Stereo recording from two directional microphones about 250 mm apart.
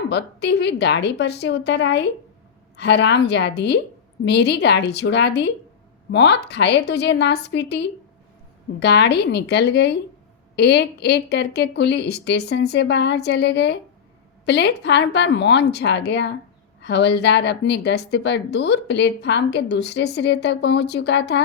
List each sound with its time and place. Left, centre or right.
0.1 s a woman's voice: left